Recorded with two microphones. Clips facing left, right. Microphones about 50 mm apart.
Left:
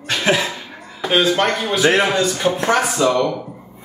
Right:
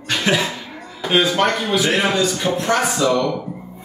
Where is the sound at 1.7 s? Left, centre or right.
Left.